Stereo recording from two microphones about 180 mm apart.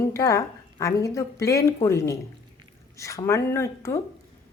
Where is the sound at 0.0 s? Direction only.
15° left (ahead or behind).